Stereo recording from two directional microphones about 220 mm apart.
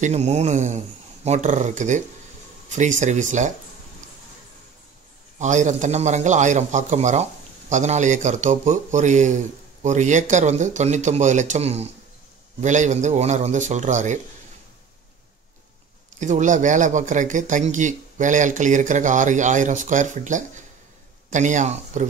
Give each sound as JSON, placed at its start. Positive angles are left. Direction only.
{"t": 0.0, "sound": "speech", "side_deg": -30}
{"t": 5.4, "sound": "speech", "side_deg": -35}
{"t": 16.2, "sound": "speech", "side_deg": -35}